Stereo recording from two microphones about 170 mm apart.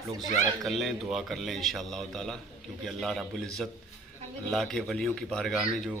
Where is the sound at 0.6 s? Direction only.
Centre (ahead or behind).